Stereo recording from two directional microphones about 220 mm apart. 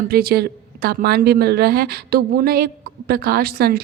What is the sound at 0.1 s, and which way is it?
A woman's voice, 45° right (ahead or behind).